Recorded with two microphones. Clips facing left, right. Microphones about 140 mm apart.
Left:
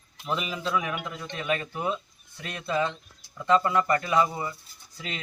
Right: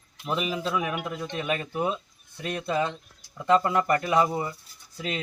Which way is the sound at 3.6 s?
20° right (ahead or behind).